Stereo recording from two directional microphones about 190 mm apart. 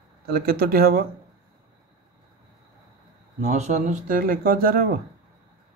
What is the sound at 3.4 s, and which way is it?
A man's voice, 40° right (ahead or behind).